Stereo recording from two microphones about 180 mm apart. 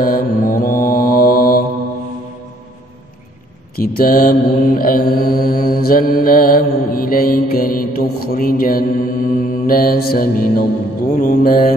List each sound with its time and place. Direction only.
0.0 s mantra: 55° left (ahead or behind)
3.7 s mantra: 55° left (ahead or behind)